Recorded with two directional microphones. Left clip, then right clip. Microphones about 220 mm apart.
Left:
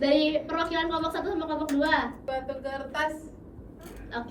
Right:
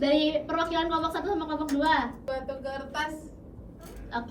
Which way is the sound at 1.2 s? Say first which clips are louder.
Even; 15° right (ahead or behind).